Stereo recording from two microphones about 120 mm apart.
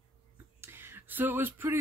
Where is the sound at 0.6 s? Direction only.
20° right (ahead or behind).